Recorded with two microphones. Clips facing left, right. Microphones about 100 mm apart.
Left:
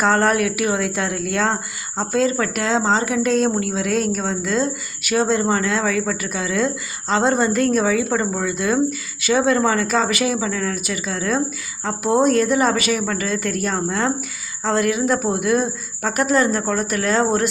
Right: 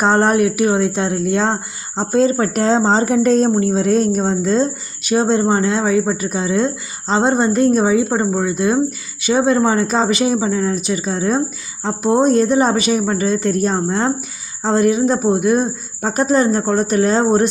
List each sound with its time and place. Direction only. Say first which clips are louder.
0.0 s a woman's voice: right 3 dB; 25° right (ahead or behind)